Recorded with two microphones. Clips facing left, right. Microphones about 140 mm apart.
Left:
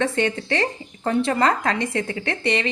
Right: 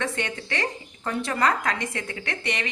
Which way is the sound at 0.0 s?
30° left (ahead or behind).